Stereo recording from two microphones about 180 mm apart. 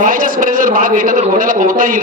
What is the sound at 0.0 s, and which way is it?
A man's voice, 50° right (ahead or behind).